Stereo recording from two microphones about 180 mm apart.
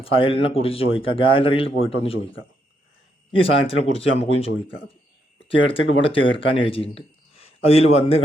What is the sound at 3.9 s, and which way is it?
Speech, 30° left (ahead or behind).